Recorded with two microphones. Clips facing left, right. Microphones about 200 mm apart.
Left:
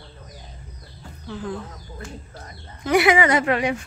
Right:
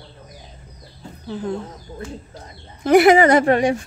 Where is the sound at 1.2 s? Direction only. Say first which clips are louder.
Right 4 dB; 30° right (ahead or behind).